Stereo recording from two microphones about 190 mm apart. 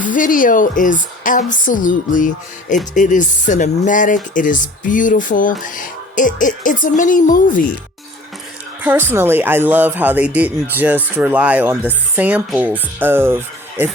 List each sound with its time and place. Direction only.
0.0 s a woman's voice: 45° left (ahead or behind)
8.8 s speech: 10° right (ahead or behind)